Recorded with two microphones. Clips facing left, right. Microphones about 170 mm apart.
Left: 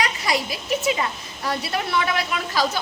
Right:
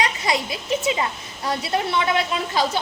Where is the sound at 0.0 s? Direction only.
25° right (ahead or behind).